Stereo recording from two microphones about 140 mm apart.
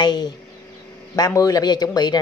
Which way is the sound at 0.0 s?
30° left (ahead or behind).